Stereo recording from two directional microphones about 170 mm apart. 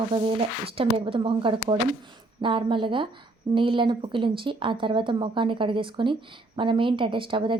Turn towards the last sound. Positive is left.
turn(degrees=-30)  # may be behind; listen again after turning